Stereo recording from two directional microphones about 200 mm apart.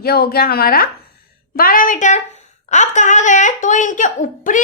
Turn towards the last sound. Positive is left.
turn(degrees=40)  # may be behind; listen again after turning